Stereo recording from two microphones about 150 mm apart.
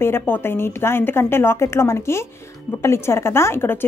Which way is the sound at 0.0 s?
15° left (ahead or behind).